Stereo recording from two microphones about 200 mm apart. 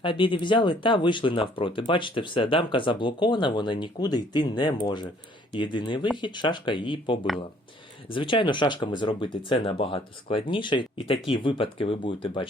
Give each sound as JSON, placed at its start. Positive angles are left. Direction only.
{"t": 0.0, "sound": "speech", "side_deg": 25}